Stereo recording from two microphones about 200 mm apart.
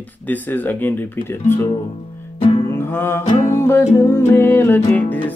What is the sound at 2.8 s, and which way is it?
Music, 10° left (ahead or behind).